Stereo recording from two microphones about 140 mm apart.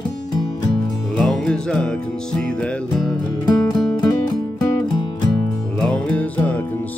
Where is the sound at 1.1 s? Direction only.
5° left (ahead or behind).